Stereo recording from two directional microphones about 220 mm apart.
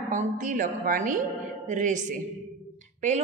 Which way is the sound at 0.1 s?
35° right (ahead or behind).